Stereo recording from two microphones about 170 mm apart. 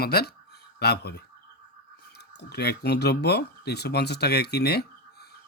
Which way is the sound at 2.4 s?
75° left (ahead or behind).